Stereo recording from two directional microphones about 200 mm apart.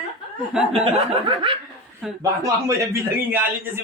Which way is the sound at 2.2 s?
15° right (ahead or behind).